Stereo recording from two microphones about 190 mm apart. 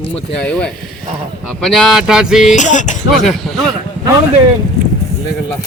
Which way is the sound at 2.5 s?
40° left (ahead or behind).